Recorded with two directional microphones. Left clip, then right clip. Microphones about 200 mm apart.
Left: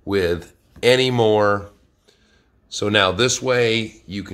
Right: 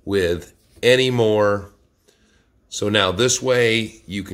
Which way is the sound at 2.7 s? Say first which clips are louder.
Left 1 dB; 10° right (ahead or behind).